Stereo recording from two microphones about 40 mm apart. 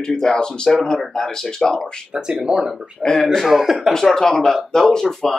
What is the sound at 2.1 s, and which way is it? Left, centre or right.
Speech, right.